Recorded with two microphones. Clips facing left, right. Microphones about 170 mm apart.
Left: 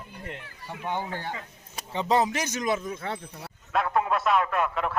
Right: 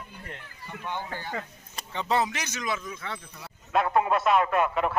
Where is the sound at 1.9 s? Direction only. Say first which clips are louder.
Left 3 dB; 35° left (ahead or behind); by 3.2 s 50° left (ahead or behind).